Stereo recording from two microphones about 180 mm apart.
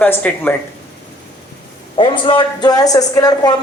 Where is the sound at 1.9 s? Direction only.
30° left (ahead or behind).